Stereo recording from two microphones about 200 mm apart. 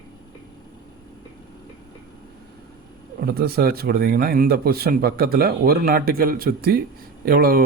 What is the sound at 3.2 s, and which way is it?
Speech, 50° right (ahead or behind).